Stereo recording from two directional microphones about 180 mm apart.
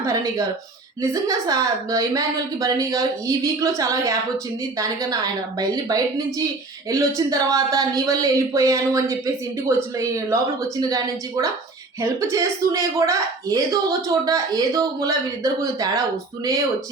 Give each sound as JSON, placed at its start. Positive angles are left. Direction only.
{"t": 0.0, "sound": "speech", "side_deg": -20}